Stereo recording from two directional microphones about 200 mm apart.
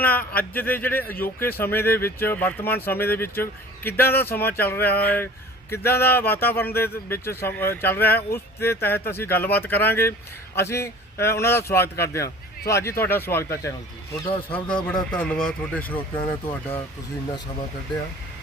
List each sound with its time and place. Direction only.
0.0 s speech: 10° left (ahead or behind)
15.1 s speech: 5° left (ahead or behind)